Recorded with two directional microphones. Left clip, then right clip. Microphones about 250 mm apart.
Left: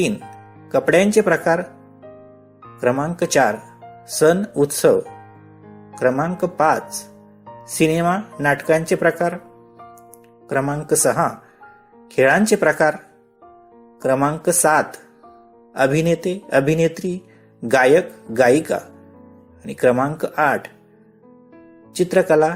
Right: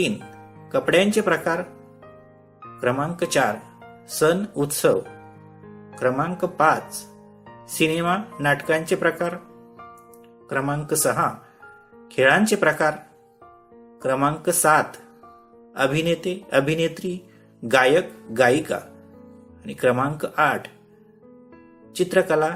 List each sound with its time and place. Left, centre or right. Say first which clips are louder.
0.7 s speech: left 4 dB; centre
2.8 s speech: left 4 dB; centre
6.0 s speech: left 4 dB; centre
10.5 s speech: left 5 dB; centre
14.0 s speech: left 4 dB; centre
21.9 s speech: left 4 dB; centre